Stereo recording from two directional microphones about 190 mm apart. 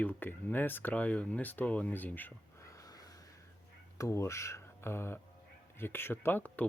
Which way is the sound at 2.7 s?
20° left (ahead or behind).